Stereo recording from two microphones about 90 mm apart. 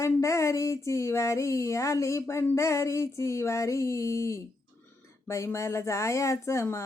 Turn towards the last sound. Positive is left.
turn(degrees=30)  # may be behind; listen again after turning